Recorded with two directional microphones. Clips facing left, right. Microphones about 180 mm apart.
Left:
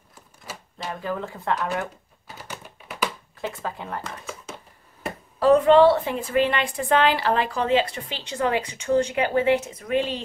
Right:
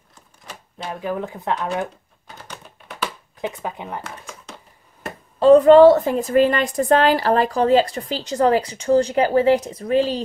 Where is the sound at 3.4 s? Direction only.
20° right (ahead or behind).